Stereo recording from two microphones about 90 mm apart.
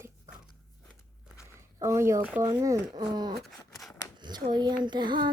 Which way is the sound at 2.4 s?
40° right (ahead or behind).